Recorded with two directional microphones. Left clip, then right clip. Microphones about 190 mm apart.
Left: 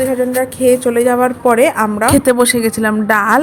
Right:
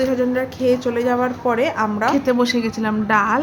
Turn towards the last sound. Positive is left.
turn(degrees=40)  # may be behind; listen again after turning